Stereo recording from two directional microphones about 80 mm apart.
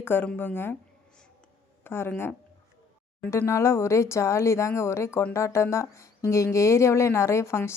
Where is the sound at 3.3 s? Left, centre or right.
Left.